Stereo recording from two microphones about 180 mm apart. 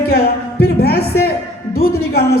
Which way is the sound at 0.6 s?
60° left (ahead or behind).